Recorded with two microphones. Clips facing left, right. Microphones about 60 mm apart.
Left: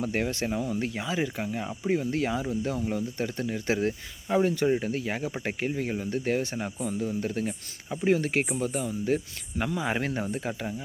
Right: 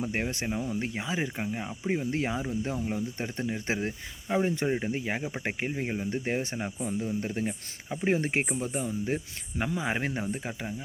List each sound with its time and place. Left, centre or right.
0.0 s speech: centre
3.8 s speech: centre
8.0 s speech: right
8.5 s speech: centre